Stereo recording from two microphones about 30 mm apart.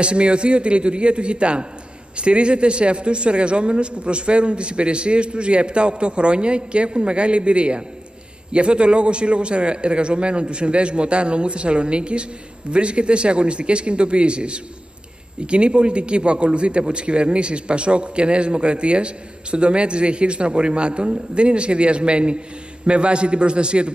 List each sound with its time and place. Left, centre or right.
0.0 s a man's voice: right